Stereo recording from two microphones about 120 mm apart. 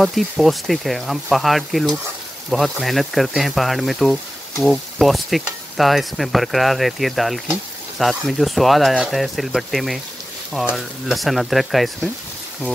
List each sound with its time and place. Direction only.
0.0 s speech: centre (ahead or behind)